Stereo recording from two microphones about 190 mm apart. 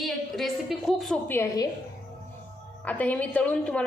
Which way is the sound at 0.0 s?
Centre (ahead or behind).